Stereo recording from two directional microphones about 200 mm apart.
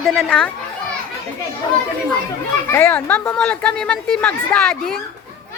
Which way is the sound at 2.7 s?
10° left (ahead or behind).